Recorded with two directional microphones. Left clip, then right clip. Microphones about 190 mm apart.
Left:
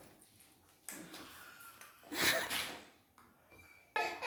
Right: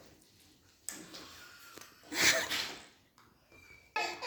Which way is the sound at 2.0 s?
5° right (ahead or behind).